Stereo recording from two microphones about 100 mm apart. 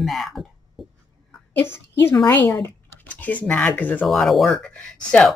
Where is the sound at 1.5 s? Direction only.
25° left (ahead or behind).